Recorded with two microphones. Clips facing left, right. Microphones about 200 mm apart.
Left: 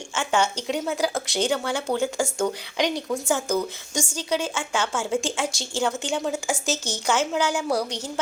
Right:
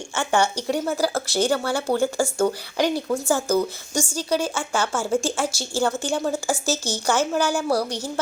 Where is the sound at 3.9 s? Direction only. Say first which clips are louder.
Right 3 dB; 10° left (ahead or behind).